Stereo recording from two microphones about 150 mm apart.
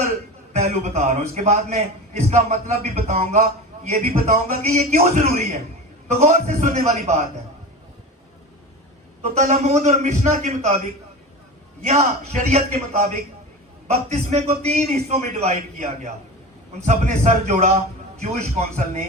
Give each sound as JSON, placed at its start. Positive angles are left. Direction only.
{"t": 0.5, "sound": "a man's voice", "side_deg": -50}
{"t": 9.2, "sound": "a man's voice", "side_deg": -55}
{"t": 11.8, "sound": "a man's voice", "side_deg": -50}